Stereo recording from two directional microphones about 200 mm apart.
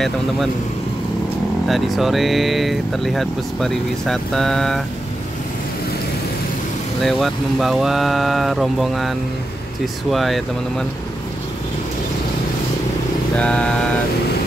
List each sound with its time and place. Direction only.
1.7 s speech: centre (ahead or behind)
7.0 s speech: centre (ahead or behind)
10.1 s speech: centre (ahead or behind)
13.4 s speech: 5° left (ahead or behind)